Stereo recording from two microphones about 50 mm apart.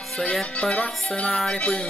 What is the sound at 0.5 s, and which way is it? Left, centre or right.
Music, left.